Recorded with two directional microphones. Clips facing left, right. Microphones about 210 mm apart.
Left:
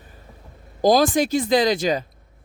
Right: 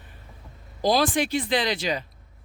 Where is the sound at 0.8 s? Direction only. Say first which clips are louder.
Left 5 dB; 45° left (ahead or behind).